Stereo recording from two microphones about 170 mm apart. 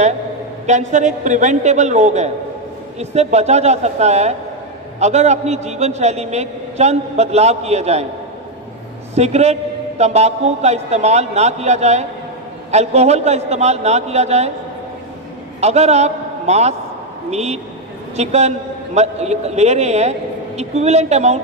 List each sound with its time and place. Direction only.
0.7 s a man's voice: 45° right (ahead or behind)
9.1 s a man's voice: 40° right (ahead or behind)
15.6 s a man's voice: 40° right (ahead or behind)